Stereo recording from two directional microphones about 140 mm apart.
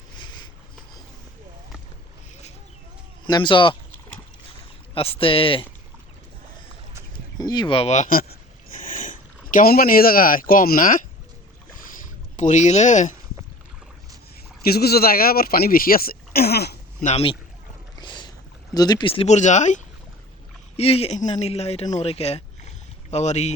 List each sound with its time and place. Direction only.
0.2 s a sound: 30° left (ahead or behind)
3.2 s speech: 35° left (ahead or behind)
4.9 s speech: 40° left (ahead or behind)
7.3 s speech: 30° left (ahead or behind); by 11.0 s 85° left
12.4 s speech: 60° left (ahead or behind)
14.6 s speech: 90° left
17.0 s speech: 55° left (ahead or behind)
18.0 s boat: 35° left (ahead or behind)
19.3 s speech: 60° left (ahead or behind)
20.7 s speech: 45° left (ahead or behind)